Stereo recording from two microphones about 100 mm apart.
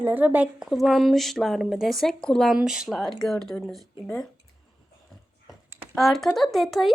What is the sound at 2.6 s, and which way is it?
Speech, 5° right (ahead or behind).